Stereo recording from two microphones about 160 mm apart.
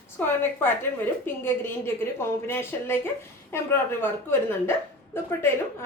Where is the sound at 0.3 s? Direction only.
15° left (ahead or behind).